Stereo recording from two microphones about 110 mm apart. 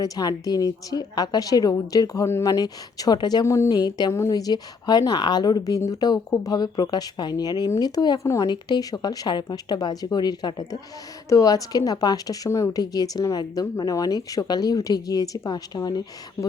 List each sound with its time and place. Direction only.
0.0 s speech: 35° left (ahead or behind)
3.4 s speech: 25° left (ahead or behind)